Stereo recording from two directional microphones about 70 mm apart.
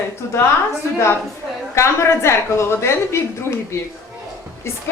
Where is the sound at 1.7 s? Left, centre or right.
Left.